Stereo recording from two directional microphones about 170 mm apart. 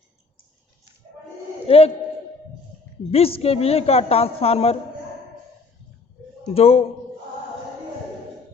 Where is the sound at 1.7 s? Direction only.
35° left (ahead or behind).